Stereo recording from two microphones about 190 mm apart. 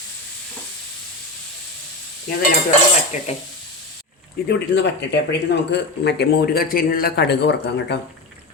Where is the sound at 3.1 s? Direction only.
40° left (ahead or behind).